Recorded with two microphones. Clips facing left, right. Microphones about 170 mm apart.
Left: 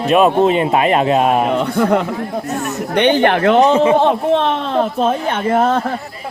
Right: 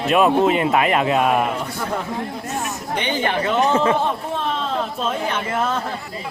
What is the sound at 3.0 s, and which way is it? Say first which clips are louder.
Speech: left 10 dB; 65° left (ahead or behind).